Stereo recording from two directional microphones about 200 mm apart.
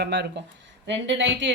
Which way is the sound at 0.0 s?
55° right (ahead or behind).